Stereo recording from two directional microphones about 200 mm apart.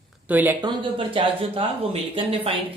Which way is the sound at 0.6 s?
25° right (ahead or behind).